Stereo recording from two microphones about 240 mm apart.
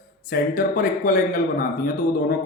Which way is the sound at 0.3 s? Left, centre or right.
Left.